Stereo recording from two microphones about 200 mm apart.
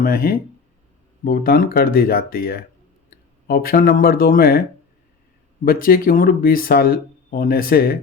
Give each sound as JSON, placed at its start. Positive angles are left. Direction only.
{"t": 0.0, "sound": "speech", "side_deg": 45}
{"t": 5.6, "sound": "speech", "side_deg": 45}